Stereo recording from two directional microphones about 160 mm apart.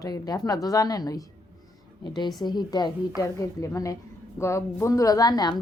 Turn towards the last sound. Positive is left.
turn(degrees=25)  # may be behind; listen again after turning